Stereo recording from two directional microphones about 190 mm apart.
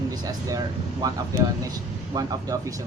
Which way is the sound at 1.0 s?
20° right (ahead or behind).